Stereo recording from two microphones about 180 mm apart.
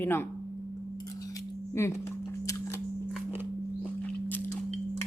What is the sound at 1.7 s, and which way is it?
Speech, 15° left (ahead or behind).